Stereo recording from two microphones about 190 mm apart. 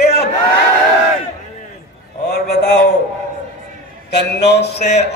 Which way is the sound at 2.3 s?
60° left (ahead or behind).